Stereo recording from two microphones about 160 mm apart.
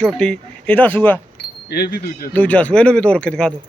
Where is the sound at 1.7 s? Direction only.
85° left.